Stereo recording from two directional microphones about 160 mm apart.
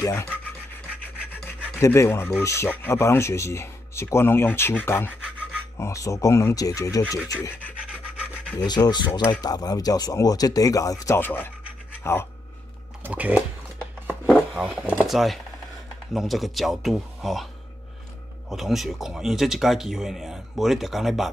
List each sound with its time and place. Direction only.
0.0 s speech: 20° left (ahead or behind)
1.6 s speech: 15° left (ahead or behind)
8.6 s speech: 25° left (ahead or behind)
13.0 s speech: 10° right (ahead or behind)
14.5 s speech: 5° right (ahead or behind)
18.5 s speech: centre (ahead or behind)